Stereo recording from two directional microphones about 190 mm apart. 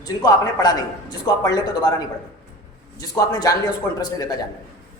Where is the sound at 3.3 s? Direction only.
20° left (ahead or behind).